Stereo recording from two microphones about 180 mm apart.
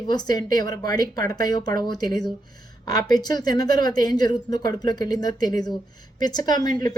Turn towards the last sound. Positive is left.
turn(degrees=20)  # may be behind; listen again after turning